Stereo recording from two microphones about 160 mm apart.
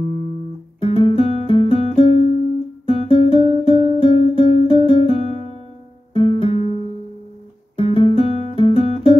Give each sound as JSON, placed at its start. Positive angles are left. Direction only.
{"t": 0.7, "sound": "music", "side_deg": 35}
{"t": 6.6, "sound": "music", "side_deg": -40}
{"t": 7.7, "sound": "music", "side_deg": 35}